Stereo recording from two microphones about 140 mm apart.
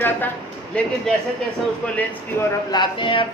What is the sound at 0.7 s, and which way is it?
Speech, 10° left (ahead or behind).